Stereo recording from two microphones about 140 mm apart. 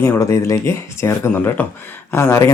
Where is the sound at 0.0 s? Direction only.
20° left (ahead or behind).